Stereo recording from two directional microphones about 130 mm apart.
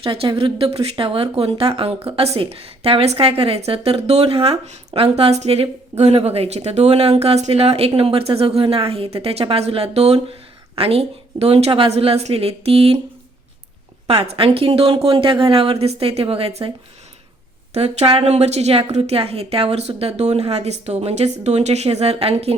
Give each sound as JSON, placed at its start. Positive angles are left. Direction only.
{"t": 0.0, "sound": "speech", "side_deg": -45}
{"t": 4.6, "sound": "speech", "side_deg": -55}
{"t": 14.1, "sound": "speech", "side_deg": -45}
{"t": 17.7, "sound": "a woman's voice", "side_deg": -50}